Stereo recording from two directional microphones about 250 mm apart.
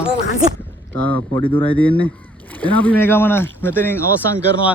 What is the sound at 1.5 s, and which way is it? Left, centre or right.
Speech, left.